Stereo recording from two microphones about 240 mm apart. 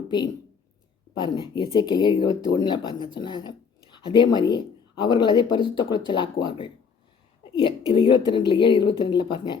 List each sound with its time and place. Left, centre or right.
1.1 s speech: centre